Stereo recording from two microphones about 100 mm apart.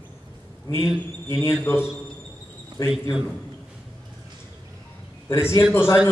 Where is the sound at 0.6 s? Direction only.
30° left (ahead or behind).